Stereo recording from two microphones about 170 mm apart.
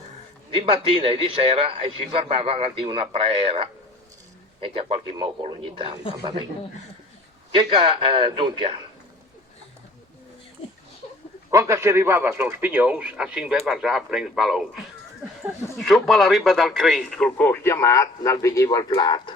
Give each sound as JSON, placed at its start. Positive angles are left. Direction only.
{"t": 0.5, "sound": "a man's voice", "side_deg": -30}
{"t": 7.5, "sound": "a man's voice", "side_deg": -30}
{"t": 11.5, "sound": "a man's voice", "side_deg": -20}
{"t": 15.8, "sound": "speech", "side_deg": 0}